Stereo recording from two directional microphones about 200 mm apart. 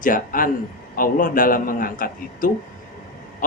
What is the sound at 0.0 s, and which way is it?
A man's voice, 45° left (ahead or behind).